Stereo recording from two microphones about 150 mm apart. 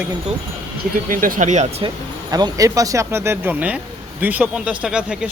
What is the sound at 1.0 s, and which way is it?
Speech, 65° right (ahead or behind).